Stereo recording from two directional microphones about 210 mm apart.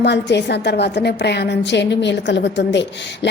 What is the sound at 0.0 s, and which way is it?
A woman's voice, 55° left (ahead or behind).